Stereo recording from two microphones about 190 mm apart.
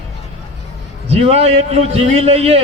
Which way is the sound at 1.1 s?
30° right (ahead or behind).